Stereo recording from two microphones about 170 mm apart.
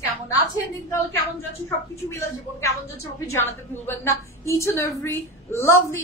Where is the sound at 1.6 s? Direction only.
15° left (ahead or behind).